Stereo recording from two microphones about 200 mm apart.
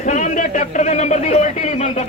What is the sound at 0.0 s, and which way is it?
A man's voice, 40° left (ahead or behind).